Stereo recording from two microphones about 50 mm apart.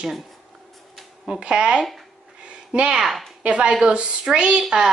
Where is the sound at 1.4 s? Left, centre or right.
Centre.